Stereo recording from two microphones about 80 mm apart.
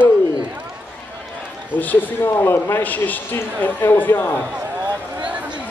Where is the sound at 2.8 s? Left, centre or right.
Left.